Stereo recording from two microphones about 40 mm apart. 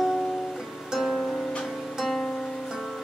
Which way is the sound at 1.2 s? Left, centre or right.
Centre.